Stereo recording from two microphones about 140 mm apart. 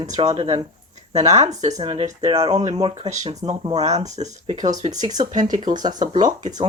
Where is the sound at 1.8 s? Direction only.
40° right (ahead or behind).